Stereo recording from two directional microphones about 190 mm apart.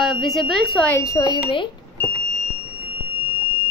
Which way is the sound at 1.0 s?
20° left (ahead or behind).